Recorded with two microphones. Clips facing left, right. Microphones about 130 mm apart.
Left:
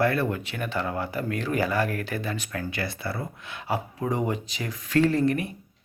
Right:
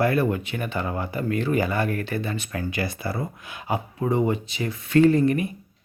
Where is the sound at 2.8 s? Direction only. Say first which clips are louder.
Right 5 dB; 20° right (ahead or behind).